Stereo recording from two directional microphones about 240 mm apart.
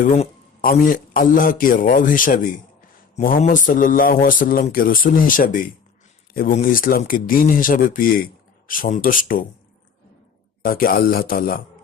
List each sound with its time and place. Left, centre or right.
0.0 s speech: left
10.6 s speech: left